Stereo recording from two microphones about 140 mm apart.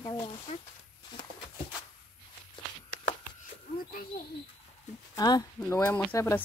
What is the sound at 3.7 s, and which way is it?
Speech, 90° left.